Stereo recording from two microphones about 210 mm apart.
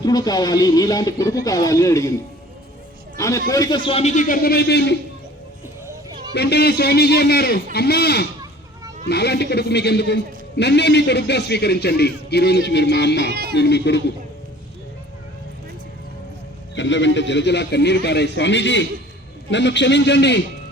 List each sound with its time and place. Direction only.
0.0 s speech: 20° left (ahead or behind)
3.2 s a man's voice: 15° left (ahead or behind); by 4.9 s 55° left (ahead or behind)
6.3 s a man's voice: 50° left (ahead or behind)
16.7 s a man's voice: 60° left (ahead or behind)